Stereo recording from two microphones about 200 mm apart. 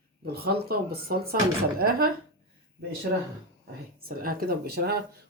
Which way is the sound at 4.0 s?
50° right (ahead or behind).